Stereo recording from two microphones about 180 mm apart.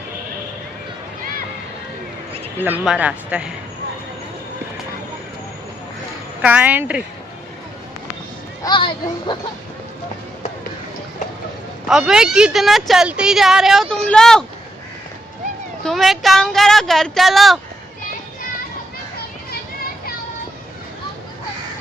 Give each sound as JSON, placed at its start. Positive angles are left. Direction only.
{"t": 2.6, "sound": "speech", "side_deg": -5}
{"t": 6.4, "sound": "speech", "side_deg": -10}
{"t": 8.6, "sound": "speech", "side_deg": 25}
{"t": 11.9, "sound": "a woman's voice", "side_deg": 0}
{"t": 15.8, "sound": "a woman's voice", "side_deg": 0}